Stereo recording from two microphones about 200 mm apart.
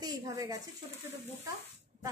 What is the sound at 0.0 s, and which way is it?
Speech, 20° right (ahead or behind).